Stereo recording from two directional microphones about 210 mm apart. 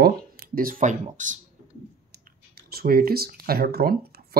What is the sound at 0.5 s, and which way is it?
Speech, 40° right (ahead or behind).